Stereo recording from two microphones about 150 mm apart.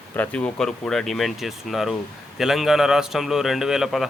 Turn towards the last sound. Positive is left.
turn(degrees=0)  # may be behind; listen again after turning